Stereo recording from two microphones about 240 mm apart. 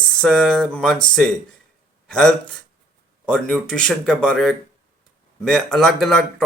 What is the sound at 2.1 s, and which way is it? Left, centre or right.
Speech, centre.